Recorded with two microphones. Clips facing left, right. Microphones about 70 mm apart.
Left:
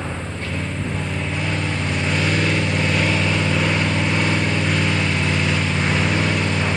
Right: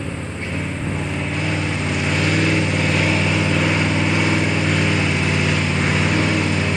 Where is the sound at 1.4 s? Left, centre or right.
Centre.